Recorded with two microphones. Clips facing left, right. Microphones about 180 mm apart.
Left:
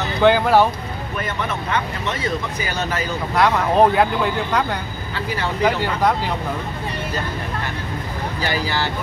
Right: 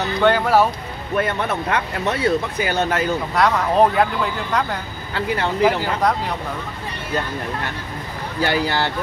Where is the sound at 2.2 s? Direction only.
60° right (ahead or behind).